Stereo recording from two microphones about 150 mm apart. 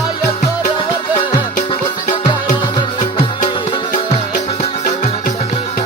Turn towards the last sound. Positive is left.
turn(degrees=50)  # may be behind; listen again after turning